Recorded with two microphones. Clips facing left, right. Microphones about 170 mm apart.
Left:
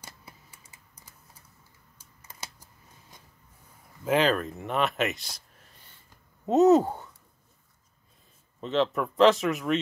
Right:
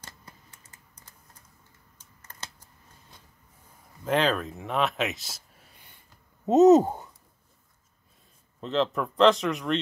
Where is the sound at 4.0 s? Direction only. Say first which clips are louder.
Left 1 dB; 5° left (ahead or behind).